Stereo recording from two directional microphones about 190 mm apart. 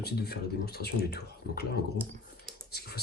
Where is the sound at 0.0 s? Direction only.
55° left (ahead or behind).